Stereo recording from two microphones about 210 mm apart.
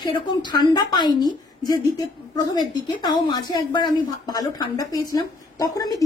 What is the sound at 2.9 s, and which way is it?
Speech, 20° left (ahead or behind).